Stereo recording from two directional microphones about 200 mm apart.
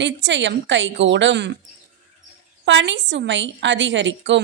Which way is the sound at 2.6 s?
65° right (ahead or behind).